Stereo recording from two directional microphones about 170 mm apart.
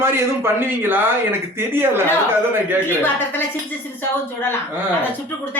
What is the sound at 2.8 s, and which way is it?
A woman's voice, 10° left (ahead or behind).